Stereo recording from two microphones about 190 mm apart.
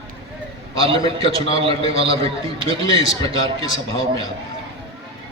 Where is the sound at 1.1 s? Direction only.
30° right (ahead or behind).